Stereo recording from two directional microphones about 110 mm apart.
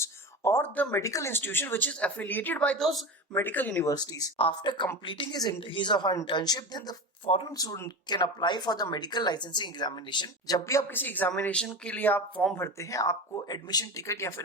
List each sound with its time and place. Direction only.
0.0 s a sound: 25° left (ahead or behind)
1.0 s speech: 30° left (ahead or behind)
3.8 s speech: 30° left (ahead or behind)
4.4 s speech: 50° left (ahead or behind); by 14.4 s 25° left (ahead or behind)